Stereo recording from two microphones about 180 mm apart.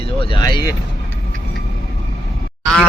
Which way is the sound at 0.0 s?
30° left (ahead or behind).